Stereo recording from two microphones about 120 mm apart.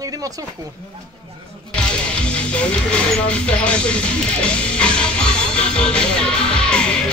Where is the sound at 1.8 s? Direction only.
10° left (ahead or behind).